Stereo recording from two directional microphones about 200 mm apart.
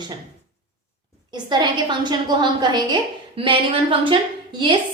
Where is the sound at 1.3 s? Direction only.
20° right (ahead or behind).